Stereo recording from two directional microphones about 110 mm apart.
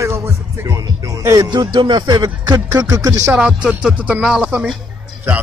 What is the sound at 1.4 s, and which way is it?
Speech, 40° right (ahead or behind).